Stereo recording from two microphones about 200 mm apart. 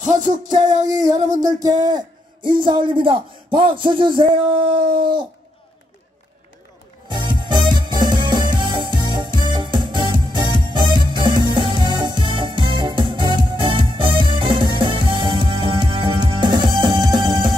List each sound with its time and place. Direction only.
0.0 s music: 40° right (ahead or behind)
1.6 s a man's voice: 20° right (ahead or behind)
7.1 s music: 20° right (ahead or behind)